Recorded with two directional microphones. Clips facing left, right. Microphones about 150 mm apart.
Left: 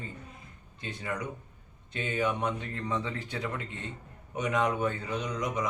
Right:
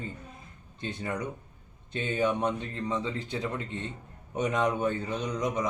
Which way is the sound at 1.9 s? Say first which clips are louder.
Right 2 dB; 30° right (ahead or behind).